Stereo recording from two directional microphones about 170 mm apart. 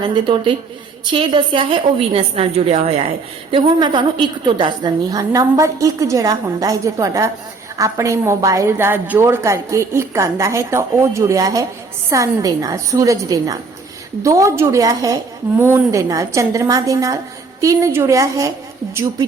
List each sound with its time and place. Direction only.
0.0 s a woman's voice: 30° right (ahead or behind)